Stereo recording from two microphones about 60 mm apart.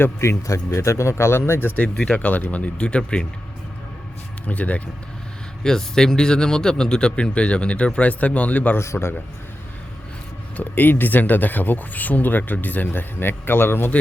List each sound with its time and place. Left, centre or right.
0.0 s speech: left
2.1 s speech: left
4.4 s speech: left
5.6 s a man's voice: centre; by 8.8 s left
8.8 s speech: left
10.6 s speech: left